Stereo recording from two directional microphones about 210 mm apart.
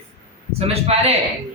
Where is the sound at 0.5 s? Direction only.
30° right (ahead or behind).